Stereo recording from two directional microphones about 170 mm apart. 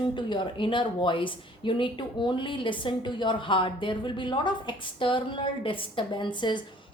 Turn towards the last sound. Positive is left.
turn(degrees=25)  # may be behind; listen again after turning